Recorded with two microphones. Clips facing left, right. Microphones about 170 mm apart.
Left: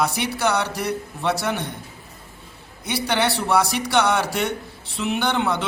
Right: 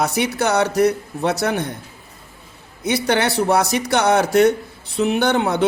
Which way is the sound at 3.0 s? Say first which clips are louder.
Right 3 dB; 45° right (ahead or behind).